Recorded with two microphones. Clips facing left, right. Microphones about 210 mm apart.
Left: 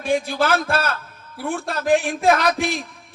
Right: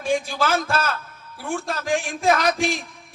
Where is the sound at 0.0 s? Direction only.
60° left (ahead or behind).